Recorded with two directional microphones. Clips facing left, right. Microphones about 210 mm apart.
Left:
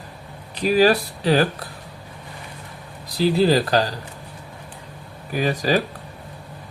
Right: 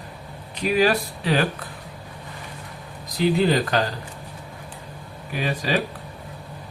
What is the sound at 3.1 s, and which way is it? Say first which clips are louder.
Speech: left 2 dB; 35° left (ahead or behind).